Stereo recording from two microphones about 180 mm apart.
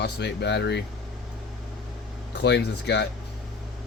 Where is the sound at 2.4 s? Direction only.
70° left (ahead or behind).